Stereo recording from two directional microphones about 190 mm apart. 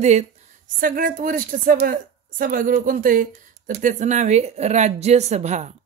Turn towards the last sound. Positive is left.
turn(degrees=-35)  # may be behind; listen again after turning